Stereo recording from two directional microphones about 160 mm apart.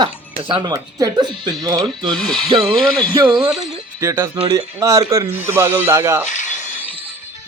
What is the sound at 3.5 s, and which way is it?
Speech, 5° right (ahead or behind).